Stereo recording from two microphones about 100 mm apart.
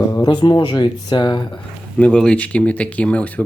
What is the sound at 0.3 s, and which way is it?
Speech, 50° left (ahead or behind).